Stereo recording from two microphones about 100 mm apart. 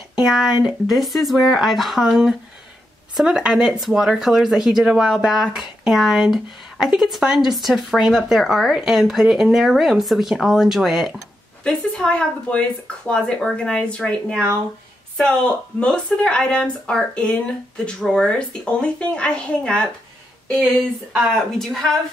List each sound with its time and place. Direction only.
0.2 s speech: 5° right (ahead or behind)
11.6 s speech: 10° left (ahead or behind)
21.5 s speech: 5° left (ahead or behind)